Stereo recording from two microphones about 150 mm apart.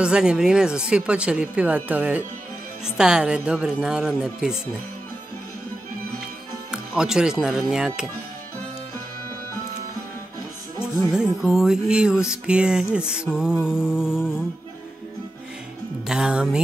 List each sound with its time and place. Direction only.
0.0 s music: 5° right (ahead or behind)
1.9 s speech: 10° right (ahead or behind)
2.8 s music: 5° right (ahead or behind)
6.7 s speech: 5° right (ahead or behind)
11.1 s music: 5° right (ahead or behind)
16.1 s music: 5° right (ahead or behind)